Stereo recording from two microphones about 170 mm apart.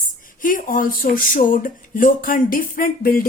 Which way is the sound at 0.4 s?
55° left (ahead or behind).